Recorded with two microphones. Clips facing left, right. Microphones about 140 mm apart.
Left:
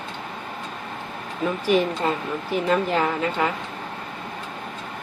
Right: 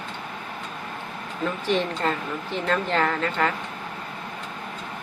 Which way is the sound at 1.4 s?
10° left (ahead or behind).